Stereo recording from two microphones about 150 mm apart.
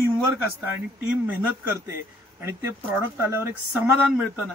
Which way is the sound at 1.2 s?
15° right (ahead or behind).